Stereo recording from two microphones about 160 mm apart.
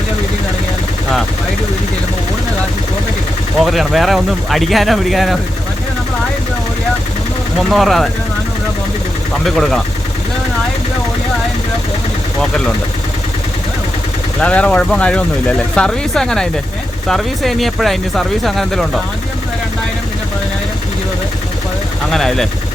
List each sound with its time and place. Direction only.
3.6 s speech: centre (ahead or behind)
7.7 s speech: centre (ahead or behind)
9.6 s speech: centre (ahead or behind)
14.4 s speech: 5° left (ahead or behind)
22.1 s speech: centre (ahead or behind)